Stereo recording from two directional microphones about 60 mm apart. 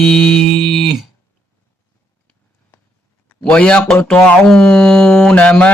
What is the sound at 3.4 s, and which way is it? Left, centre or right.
Speech, centre.